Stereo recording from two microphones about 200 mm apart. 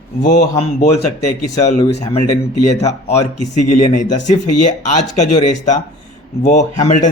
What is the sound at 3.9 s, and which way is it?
A man's voice, 35° left (ahead or behind).